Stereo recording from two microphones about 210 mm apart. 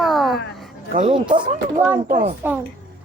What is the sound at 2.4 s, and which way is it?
Speech, 10° right (ahead or behind).